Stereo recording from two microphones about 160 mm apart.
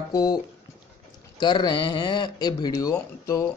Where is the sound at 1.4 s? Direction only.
30° left (ahead or behind).